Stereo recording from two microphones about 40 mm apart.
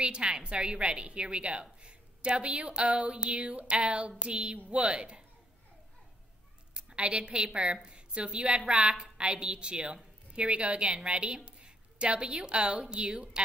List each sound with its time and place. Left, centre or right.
0.0 s a woman's voice: right
6.7 s a woman's voice: right
8.9 s a woman's voice: centre